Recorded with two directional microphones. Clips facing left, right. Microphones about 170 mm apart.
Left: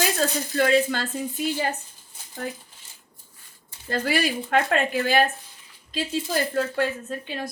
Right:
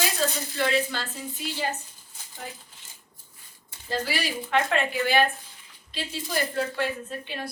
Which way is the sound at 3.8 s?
55° left (ahead or behind).